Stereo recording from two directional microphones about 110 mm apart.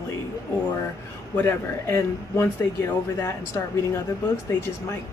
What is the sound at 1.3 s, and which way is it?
Speech, 20° left (ahead or behind).